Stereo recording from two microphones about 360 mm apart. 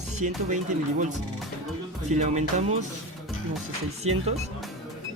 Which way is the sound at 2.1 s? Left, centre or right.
Centre.